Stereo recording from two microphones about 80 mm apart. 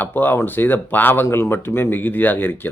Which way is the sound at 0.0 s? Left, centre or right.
Left.